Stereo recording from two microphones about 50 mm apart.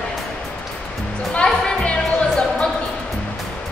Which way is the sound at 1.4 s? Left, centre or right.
Centre.